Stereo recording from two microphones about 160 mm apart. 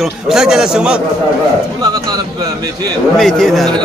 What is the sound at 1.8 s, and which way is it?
Speech, 25° right (ahead or behind).